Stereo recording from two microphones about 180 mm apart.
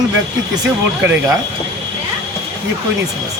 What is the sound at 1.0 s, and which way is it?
Speech, 10° right (ahead or behind).